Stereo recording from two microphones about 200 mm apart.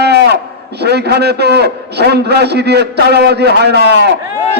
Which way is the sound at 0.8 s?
55° right (ahead or behind).